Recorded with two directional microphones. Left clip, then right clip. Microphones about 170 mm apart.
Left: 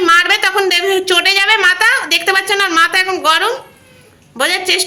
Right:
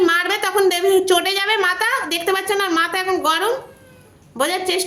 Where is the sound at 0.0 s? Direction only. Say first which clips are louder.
Left 7 dB; 20° right (ahead or behind).